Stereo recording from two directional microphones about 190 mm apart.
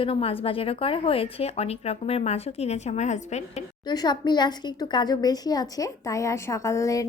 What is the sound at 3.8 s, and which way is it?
A woman's voice, 20° left (ahead or behind).